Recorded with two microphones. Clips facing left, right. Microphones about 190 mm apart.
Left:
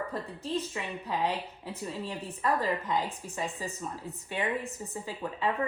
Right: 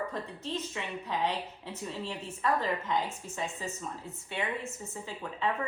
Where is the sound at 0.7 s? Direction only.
10° left (ahead or behind).